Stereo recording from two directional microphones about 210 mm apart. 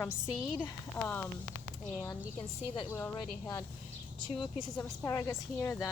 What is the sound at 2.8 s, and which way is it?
Speech, 15° left (ahead or behind).